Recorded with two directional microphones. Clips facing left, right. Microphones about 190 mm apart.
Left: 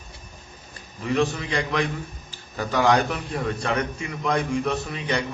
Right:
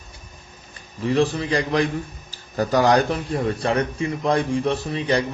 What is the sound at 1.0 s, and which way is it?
A man's voice, 35° right (ahead or behind).